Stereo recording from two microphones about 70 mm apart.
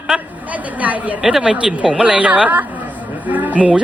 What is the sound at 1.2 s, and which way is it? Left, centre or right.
A woman's voice, centre.